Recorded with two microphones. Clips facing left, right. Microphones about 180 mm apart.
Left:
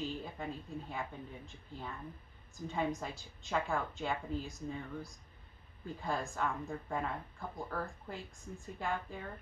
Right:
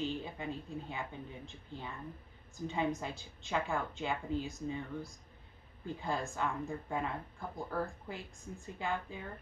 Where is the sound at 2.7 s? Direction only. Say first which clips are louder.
Right 1 dB; centre (ahead or behind).